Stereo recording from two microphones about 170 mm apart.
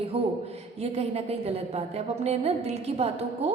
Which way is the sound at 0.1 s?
35° right (ahead or behind).